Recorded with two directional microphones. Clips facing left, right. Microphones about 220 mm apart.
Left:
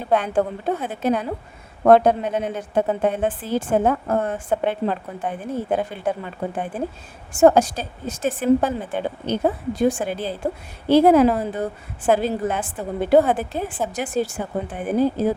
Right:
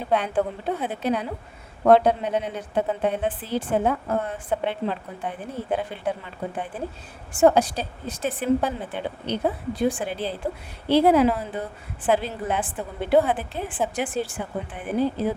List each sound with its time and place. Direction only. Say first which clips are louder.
0.1 s a woman's voice: left 3 dB; 45° left (ahead or behind)
7.3 s a woman's voice: left 3 dB; 45° left (ahead or behind)